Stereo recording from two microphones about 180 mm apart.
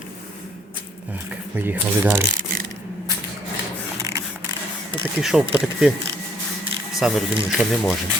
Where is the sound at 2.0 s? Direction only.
15° right (ahead or behind).